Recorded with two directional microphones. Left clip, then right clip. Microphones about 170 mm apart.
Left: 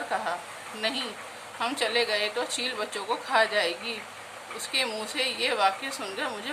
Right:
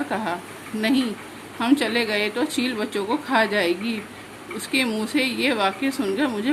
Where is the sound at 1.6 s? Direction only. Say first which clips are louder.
Right 5 dB; 25° right (ahead or behind).